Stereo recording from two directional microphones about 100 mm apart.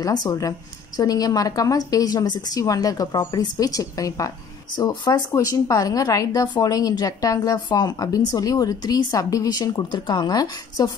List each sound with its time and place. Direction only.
0.0 s speech: 40° left (ahead or behind)
4.7 s speech: 45° left (ahead or behind)
5.3 s speech: 35° left (ahead or behind)